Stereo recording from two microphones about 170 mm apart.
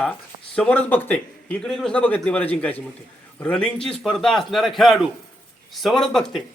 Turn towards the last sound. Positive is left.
turn(degrees=5)  # may be behind; listen again after turning